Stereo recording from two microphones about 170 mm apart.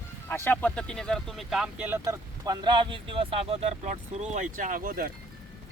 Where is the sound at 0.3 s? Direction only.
15° left (ahead or behind); by 5.1 s 60° right (ahead or behind).